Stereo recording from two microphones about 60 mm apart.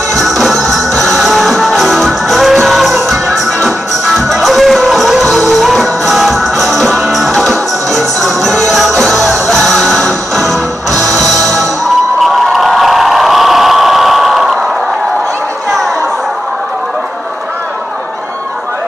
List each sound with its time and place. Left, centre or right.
0.1 s music: centre
10.9 s music: right
12.2 s a sound: centre